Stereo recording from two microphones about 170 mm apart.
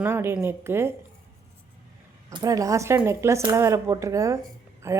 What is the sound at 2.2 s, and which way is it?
A woman's voice, 20° right (ahead or behind).